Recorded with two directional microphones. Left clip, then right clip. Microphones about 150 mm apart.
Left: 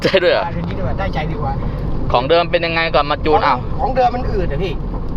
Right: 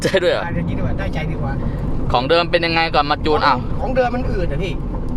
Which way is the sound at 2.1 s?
30° right (ahead or behind).